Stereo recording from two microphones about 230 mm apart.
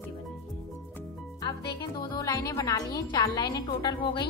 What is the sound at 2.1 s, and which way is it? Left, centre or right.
A woman's voice, centre.